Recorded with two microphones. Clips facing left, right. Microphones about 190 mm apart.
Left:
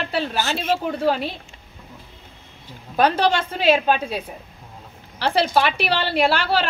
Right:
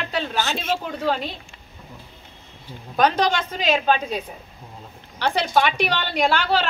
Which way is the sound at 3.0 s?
5° left (ahead or behind).